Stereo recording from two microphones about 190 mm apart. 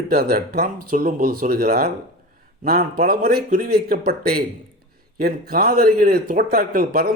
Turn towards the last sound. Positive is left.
turn(degrees=-50)  # may be behind; listen again after turning